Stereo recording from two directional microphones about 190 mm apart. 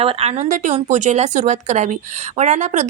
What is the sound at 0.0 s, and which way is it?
Speech, 30° right (ahead or behind).